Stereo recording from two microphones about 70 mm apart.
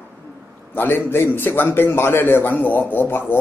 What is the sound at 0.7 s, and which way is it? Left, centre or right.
A man's voice, left.